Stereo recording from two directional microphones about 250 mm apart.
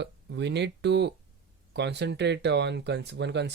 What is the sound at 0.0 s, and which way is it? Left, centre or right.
Speech, right.